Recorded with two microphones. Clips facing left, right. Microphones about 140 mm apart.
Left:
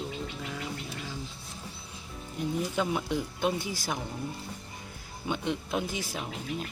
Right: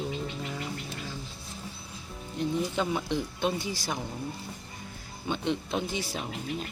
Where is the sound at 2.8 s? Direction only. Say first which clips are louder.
Even; 5° left (ahead or behind).